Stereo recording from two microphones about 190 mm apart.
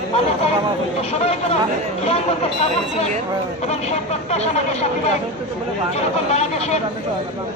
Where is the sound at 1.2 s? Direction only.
35° left (ahead or behind).